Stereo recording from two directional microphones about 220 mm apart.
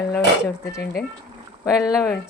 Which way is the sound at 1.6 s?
15° left (ahead or behind).